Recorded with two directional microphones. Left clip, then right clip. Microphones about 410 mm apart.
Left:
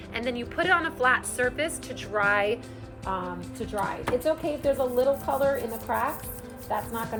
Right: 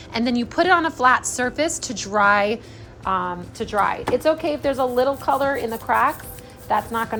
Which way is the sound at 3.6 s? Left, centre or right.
Centre.